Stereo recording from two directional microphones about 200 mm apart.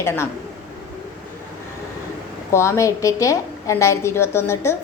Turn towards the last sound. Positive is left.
turn(degrees=15)  # may be behind; listen again after turning